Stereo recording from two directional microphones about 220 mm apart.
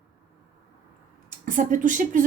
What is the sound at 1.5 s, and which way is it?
Speech, 35° right (ahead or behind).